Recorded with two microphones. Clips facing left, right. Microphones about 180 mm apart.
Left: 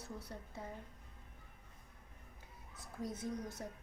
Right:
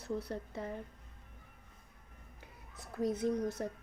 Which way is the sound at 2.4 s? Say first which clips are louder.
Right 4 dB; 70° right (ahead or behind).